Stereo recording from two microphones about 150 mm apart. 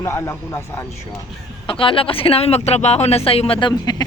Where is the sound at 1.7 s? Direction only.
35° left (ahead or behind).